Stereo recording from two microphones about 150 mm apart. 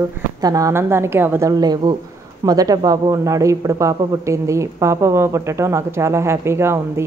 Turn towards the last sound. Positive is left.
turn(degrees=-15)  # may be behind; listen again after turning